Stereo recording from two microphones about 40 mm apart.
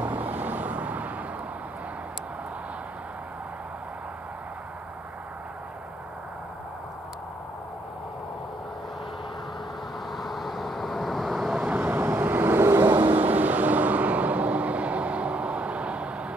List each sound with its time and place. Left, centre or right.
0.0 s vehicle: right
10.1 s vehicle: centre
11.5 s vehicle: right